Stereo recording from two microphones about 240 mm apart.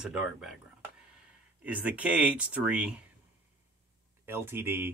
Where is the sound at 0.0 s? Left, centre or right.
Centre.